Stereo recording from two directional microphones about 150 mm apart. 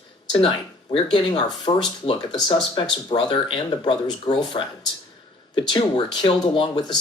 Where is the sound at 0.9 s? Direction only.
30° left (ahead or behind).